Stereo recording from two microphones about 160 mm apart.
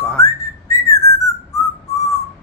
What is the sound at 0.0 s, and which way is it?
Whistling, 15° left (ahead or behind).